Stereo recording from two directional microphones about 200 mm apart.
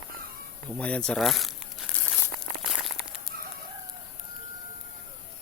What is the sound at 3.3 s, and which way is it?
Chicken, 45° right (ahead or behind).